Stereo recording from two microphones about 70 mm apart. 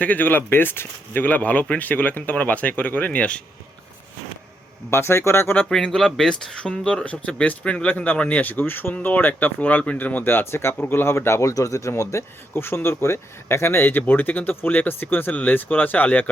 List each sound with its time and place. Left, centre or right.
0.0 s speech: left
4.9 s speech: left
5.6 s speech: centre